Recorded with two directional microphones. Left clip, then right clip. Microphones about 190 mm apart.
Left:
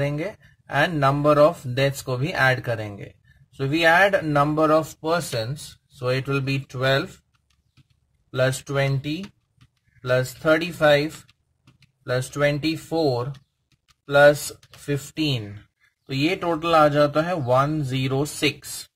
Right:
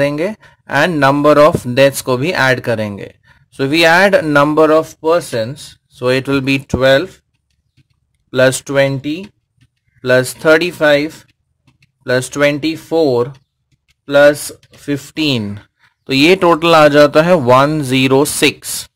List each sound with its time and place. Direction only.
0.0 s speech: 35° right (ahead or behind)
8.3 s speech: 35° right (ahead or behind)
16.0 s speech: 50° right (ahead or behind)